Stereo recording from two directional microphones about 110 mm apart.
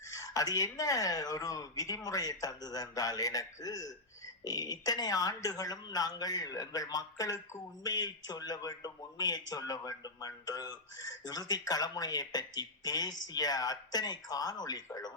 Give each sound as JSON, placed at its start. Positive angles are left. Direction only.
{"t": 0.1, "sound": "speech", "side_deg": 30}